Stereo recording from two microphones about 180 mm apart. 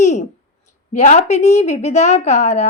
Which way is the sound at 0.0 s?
40° left (ahead or behind).